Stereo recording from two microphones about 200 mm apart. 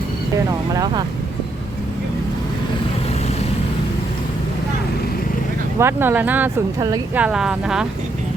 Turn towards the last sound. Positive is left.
turn(degrees=-5)  # may be behind; listen again after turning